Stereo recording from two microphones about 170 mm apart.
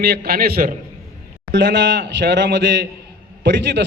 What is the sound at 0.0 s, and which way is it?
Speech, 70° right (ahead or behind).